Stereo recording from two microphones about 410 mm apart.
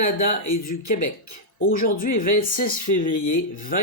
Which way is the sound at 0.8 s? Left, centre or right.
Left.